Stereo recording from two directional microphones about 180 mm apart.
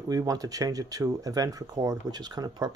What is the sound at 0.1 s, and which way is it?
Speech, 20° right (ahead or behind).